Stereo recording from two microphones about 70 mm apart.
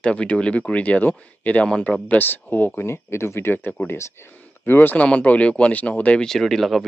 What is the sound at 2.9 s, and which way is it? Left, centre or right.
Speech, left.